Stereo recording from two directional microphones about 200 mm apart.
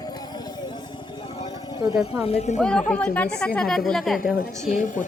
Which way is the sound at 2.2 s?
30° left (ahead or behind).